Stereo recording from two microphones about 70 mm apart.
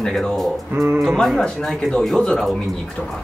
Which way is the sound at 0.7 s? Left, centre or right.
Right.